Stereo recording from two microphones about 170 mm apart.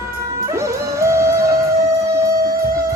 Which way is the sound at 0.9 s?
15° right (ahead or behind).